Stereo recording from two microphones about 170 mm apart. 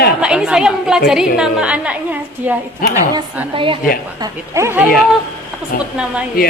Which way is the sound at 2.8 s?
55° left (ahead or behind).